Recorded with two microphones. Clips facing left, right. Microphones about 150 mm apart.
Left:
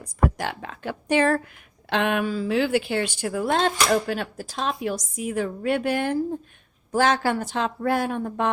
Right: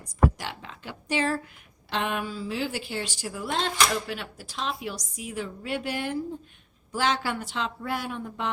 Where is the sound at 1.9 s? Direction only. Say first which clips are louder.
Left 6 dB; 70° left (ahead or behind).